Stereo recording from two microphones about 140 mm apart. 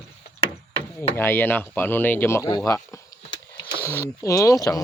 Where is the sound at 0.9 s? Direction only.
15° left (ahead or behind).